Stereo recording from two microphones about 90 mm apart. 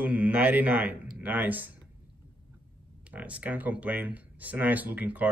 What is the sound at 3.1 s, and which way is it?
A man's voice, 15° right (ahead or behind).